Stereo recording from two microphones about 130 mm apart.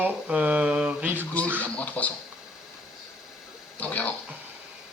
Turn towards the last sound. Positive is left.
turn(degrees=10)  # may be behind; listen again after turning